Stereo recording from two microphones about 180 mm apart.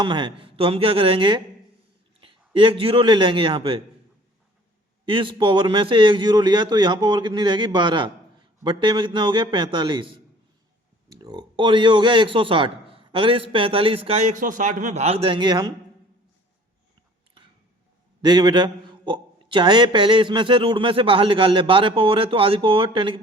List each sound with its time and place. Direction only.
0.0 s a man's voice: 25° right (ahead or behind)
5.0 s a man's voice: 30° right (ahead or behind)
18.2 s a man's voice: 25° right (ahead or behind)